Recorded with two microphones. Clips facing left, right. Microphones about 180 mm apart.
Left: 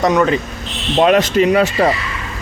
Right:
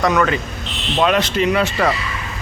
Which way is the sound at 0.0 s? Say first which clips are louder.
Left 3 dB; 20° left (ahead or behind).